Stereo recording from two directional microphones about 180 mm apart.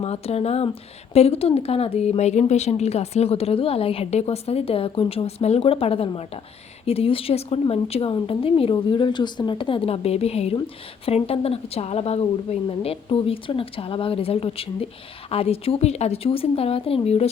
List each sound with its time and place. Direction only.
0.0 s a woman's voice: 35° left (ahead or behind)